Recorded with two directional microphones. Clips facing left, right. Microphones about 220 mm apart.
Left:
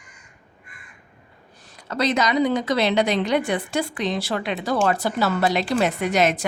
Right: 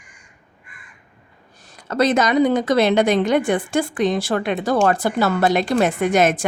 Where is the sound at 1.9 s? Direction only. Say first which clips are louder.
Right 4 dB; 50° right (ahead or behind).